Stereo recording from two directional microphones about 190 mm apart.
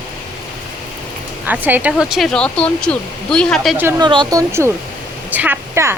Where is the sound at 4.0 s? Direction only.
25° right (ahead or behind).